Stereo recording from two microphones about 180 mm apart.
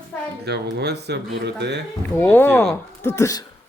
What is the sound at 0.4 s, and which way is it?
Speech, 65° right (ahead or behind).